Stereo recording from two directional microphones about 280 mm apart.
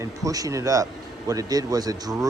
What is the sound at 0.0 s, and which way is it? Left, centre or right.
Speech, centre.